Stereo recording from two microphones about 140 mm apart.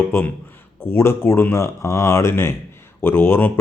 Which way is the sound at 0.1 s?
15° left (ahead or behind).